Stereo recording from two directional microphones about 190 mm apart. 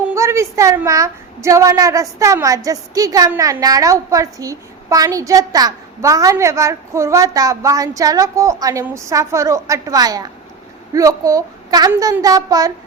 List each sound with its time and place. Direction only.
0.1 s a woman's voice: 15° right (ahead or behind)